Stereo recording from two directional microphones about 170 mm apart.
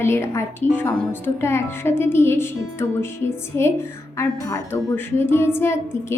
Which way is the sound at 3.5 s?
15° left (ahead or behind).